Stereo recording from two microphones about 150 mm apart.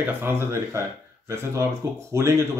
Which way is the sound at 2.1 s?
20° right (ahead or behind).